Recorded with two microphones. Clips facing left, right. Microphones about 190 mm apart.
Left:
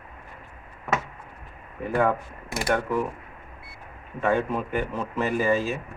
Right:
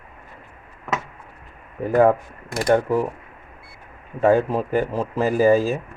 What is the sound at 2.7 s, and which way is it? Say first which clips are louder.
Speech: right 7 dB; 35° right (ahead or behind).